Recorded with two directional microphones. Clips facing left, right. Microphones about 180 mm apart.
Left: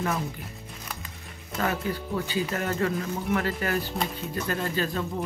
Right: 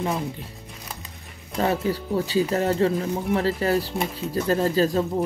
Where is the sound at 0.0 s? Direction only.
30° right (ahead or behind).